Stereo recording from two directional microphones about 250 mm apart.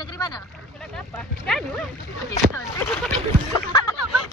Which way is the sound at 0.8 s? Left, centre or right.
Centre.